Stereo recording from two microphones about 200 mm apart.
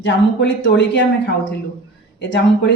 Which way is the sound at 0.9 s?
60° left (ahead or behind).